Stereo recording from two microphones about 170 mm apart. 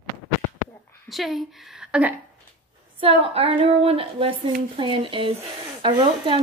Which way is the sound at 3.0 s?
35° right (ahead or behind).